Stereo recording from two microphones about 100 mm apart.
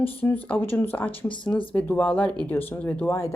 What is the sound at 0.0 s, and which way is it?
Speech, 20° left (ahead or behind).